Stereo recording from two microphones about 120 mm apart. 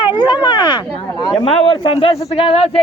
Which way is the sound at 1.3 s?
45° left (ahead or behind).